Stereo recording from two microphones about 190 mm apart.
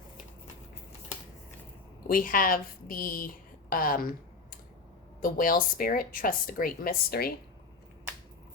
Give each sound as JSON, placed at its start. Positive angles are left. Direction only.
{"t": 2.0, "sound": "speech", "side_deg": 45}
{"t": 5.2, "sound": "speech", "side_deg": 50}